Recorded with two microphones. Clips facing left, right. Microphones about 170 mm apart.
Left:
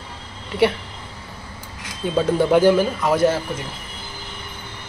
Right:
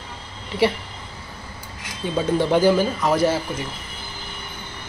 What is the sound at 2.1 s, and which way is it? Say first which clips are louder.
Speech: left 3 dB; centre (ahead or behind).